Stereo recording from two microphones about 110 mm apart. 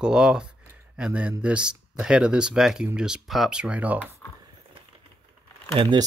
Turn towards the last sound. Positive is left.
turn(degrees=-45)  # may be behind; listen again after turning